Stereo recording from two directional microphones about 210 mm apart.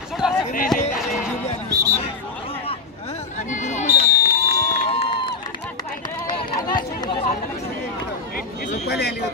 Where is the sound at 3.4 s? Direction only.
35° left (ahead or behind).